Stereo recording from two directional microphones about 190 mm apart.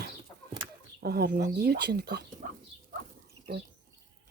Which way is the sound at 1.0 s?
55° right (ahead or behind).